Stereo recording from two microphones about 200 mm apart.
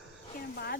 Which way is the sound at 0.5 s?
50° left (ahead or behind).